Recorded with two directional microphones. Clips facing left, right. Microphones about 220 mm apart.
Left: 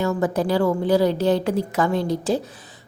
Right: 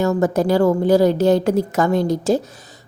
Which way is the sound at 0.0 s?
45° right (ahead or behind).